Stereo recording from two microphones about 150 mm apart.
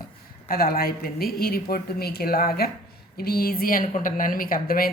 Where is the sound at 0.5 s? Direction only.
90° left.